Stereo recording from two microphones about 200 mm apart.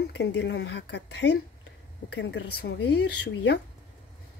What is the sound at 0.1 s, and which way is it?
Speech, 60° left (ahead or behind).